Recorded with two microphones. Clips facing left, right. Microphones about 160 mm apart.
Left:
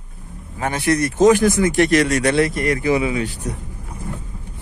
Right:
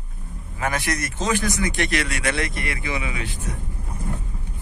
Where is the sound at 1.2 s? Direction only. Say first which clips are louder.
Left 12 dB; 45° left (ahead or behind).